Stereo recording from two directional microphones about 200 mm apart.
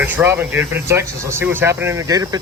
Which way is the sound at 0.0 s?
10° right (ahead or behind).